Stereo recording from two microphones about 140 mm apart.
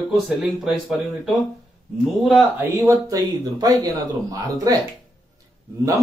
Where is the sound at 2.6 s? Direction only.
20° right (ahead or behind).